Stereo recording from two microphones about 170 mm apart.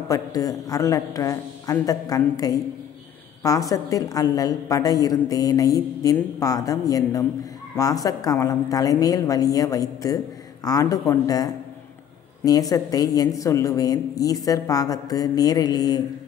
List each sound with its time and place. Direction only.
0.1 s a woman's voice: 20° left (ahead or behind)